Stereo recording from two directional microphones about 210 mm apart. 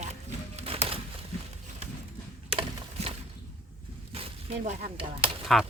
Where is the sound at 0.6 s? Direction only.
25° right (ahead or behind).